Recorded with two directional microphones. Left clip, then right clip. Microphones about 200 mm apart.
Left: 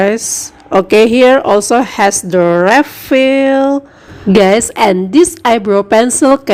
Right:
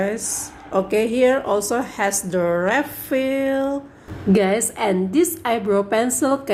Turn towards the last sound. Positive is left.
turn(degrees=40)  # may be behind; listen again after turning